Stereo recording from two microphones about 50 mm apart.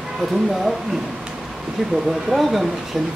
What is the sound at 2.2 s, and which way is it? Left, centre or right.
Speech, centre.